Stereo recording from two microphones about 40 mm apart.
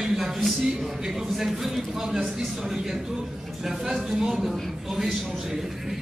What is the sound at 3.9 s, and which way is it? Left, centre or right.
Speech, centre.